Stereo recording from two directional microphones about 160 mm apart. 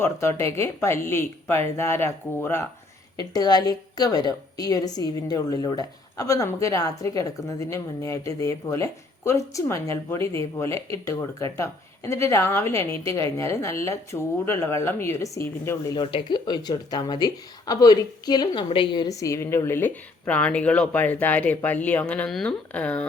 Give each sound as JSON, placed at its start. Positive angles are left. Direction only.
{"t": 0.0, "sound": "a woman's voice", "side_deg": 15}
{"t": 16.0, "sound": "speech", "side_deg": 30}